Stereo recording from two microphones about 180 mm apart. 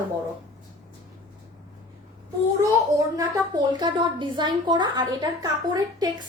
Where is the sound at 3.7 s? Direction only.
25° right (ahead or behind).